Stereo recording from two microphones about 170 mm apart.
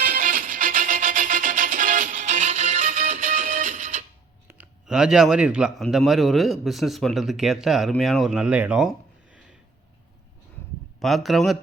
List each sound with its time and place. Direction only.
0.0 s music: 50° right (ahead or behind)
4.4 s a man's voice: 5° right (ahead or behind)
11.0 s a man's voice: centre (ahead or behind)